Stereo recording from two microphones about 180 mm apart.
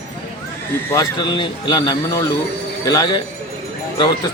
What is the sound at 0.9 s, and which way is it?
A man's voice, 25° left (ahead or behind).